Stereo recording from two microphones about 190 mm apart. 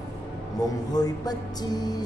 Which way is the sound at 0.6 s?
20° left (ahead or behind).